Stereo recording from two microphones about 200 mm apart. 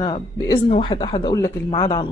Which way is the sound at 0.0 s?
20° left (ahead or behind).